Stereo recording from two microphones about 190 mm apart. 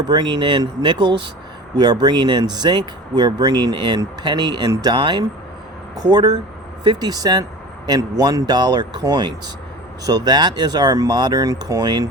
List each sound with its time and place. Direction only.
0.0 s speech: 20° right (ahead or behind)